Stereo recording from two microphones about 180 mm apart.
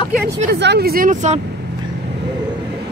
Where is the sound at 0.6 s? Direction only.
65° right (ahead or behind); by 1.4 s 40° right (ahead or behind).